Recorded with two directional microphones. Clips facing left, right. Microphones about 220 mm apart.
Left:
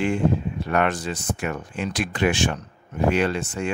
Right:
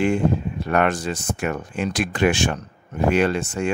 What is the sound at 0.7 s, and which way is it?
Speech, 45° right (ahead or behind).